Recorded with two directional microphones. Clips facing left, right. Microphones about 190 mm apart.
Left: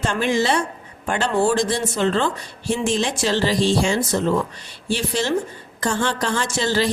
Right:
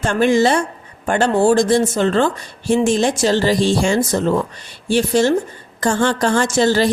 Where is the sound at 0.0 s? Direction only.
50° right (ahead or behind).